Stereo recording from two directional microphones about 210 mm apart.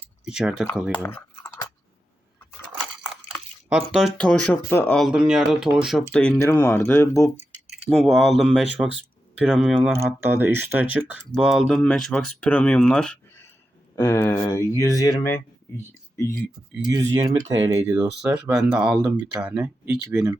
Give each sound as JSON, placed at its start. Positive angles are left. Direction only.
{"t": 0.0, "sound": "a sound", "side_deg": -5}
{"t": 0.9, "sound": "speech", "side_deg": 10}
{"t": 3.7, "sound": "speech", "side_deg": -5}
{"t": 7.9, "sound": "speech", "side_deg": 0}
{"t": 10.0, "sound": "speech", "side_deg": -10}
{"t": 15.9, "sound": "a sound", "side_deg": 10}
{"t": 16.9, "sound": "speech", "side_deg": -15}